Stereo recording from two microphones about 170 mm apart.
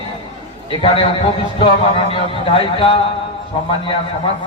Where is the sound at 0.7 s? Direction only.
30° left (ahead or behind).